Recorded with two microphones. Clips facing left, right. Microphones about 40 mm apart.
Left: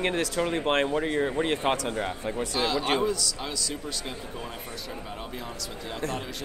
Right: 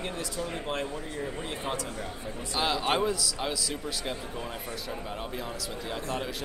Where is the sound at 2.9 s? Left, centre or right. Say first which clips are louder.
Left 1 dB; centre.